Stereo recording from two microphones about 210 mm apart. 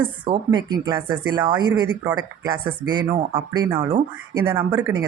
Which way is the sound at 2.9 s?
20° right (ahead or behind).